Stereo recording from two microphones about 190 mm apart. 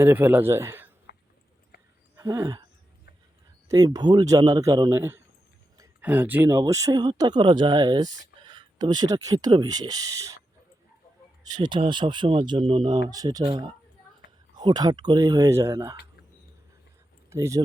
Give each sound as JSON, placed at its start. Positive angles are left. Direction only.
{"t": 0.0, "sound": "speech", "side_deg": -10}
{"t": 1.1, "sound": "a sound", "side_deg": 65}
{"t": 2.1, "sound": "speech", "side_deg": -20}
{"t": 3.7, "sound": "speech", "side_deg": -20}
{"t": 11.4, "sound": "speech", "side_deg": -20}
{"t": 17.2, "sound": "speech", "side_deg": -15}